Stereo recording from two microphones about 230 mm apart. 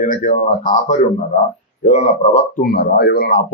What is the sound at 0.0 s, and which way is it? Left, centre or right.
A man's voice, left.